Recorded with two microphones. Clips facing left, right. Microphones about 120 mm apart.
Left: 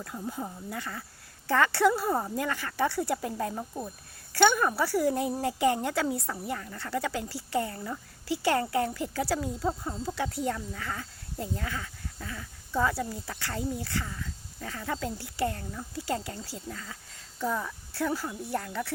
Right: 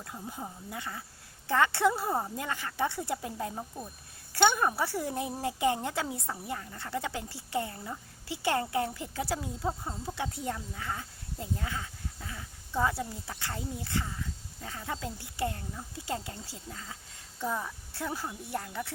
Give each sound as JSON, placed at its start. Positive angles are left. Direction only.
{"t": 0.0, "sound": "speech", "side_deg": -20}
{"t": 4.3, "sound": "speech", "side_deg": -20}